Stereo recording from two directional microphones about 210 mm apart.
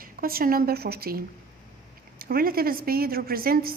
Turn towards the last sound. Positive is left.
turn(degrees=-45)  # may be behind; listen again after turning